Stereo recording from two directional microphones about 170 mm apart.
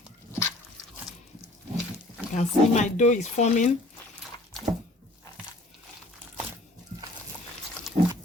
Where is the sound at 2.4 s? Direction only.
45° left (ahead or behind).